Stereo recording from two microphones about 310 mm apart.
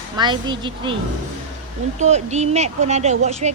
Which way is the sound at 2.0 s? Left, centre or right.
Right.